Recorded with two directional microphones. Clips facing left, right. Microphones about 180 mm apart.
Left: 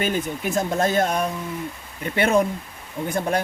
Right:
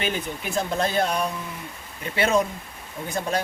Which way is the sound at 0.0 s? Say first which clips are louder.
Left 4 dB; 45° left (ahead or behind).